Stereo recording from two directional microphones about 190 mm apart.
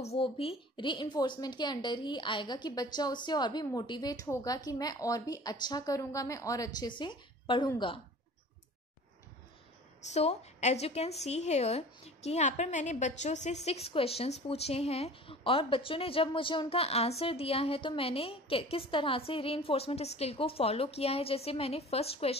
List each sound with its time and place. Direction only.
0.0 s a woman's voice: 30° left (ahead or behind)
10.0 s a woman's voice: 35° left (ahead or behind)